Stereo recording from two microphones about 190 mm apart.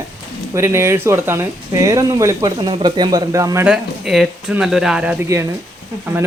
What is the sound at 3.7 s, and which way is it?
Speech, centre (ahead or behind).